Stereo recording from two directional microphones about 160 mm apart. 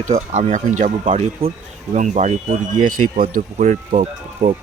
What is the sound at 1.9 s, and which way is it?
Speech, 50° right (ahead or behind).